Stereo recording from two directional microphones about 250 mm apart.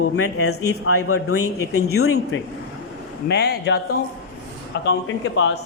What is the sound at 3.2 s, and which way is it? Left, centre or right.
A woman's voice, left.